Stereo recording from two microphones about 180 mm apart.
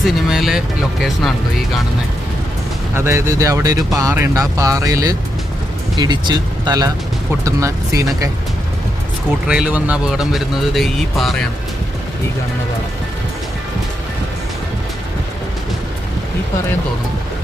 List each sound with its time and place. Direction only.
0.3 s speech: centre (ahead or behind)
2.9 s speech: 15° right (ahead or behind)
9.5 s speech: 5° right (ahead or behind)